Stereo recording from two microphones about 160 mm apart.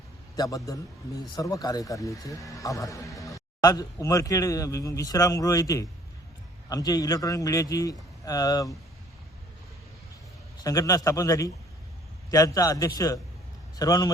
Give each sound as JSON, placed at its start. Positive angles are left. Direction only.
{"t": 0.3, "sound": "speech", "side_deg": 20}
{"t": 10.6, "sound": "speech", "side_deg": 20}